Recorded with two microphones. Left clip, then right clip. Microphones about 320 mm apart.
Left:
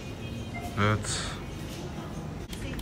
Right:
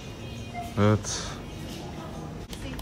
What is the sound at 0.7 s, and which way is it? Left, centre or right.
Speech, centre.